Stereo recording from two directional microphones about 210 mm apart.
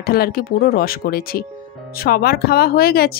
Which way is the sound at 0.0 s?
45° left (ahead or behind).